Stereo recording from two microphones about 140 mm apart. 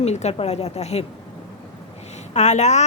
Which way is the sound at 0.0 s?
50° left (ahead or behind).